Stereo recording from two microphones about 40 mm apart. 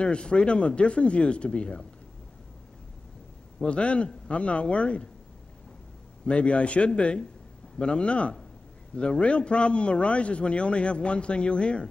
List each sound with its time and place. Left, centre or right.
0.0 s a man's voice: left
3.6 s a man's voice: left
6.2 s a man's voice: left